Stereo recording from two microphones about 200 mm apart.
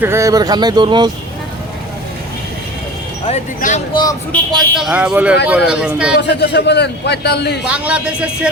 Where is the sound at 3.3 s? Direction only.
35° left (ahead or behind).